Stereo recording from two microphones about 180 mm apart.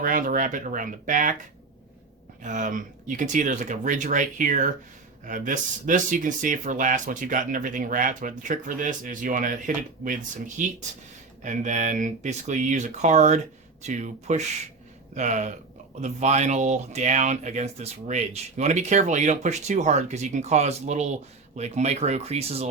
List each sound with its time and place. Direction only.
0.0 s speech: 50° right (ahead or behind)
2.4 s speech: 45° right (ahead or behind)